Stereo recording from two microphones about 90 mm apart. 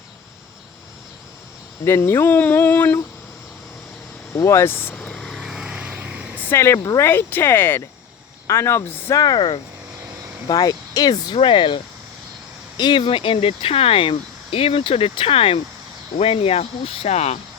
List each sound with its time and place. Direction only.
1.8 s speech: 25° left (ahead or behind)
4.4 s speech: 30° left (ahead or behind)
4.9 s vehicle: 5° left (ahead or behind); by 6.5 s 15° right (ahead or behind)
6.5 s speech: 30° left (ahead or behind)
9.2 s speech: 55° left (ahead or behind)
10.5 s speech: 45° left (ahead or behind)
11.3 s speech: 75° left (ahead or behind)
12.7 s speech: 55° left (ahead or behind); by 17.1 s 90° left